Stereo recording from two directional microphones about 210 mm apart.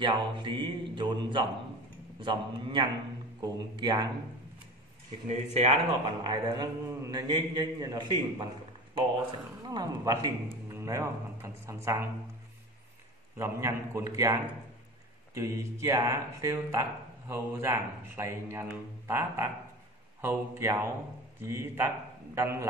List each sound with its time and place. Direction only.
0.0 s a man's voice: 20° right (ahead or behind)
5.3 s a man's voice: 30° right (ahead or behind); by 8.5 s 15° right (ahead or behind)
9.7 s a man's voice: 15° right (ahead or behind)
13.4 s a man's voice: 15° right (ahead or behind)